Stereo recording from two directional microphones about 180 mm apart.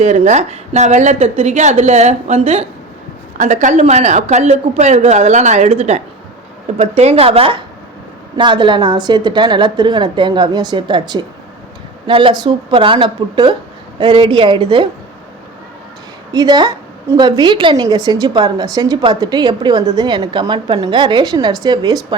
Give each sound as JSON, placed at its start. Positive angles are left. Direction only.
{"t": 0.0, "sound": "a woman's voice", "side_deg": -40}
{"t": 16.3, "sound": "a woman's voice", "side_deg": -20}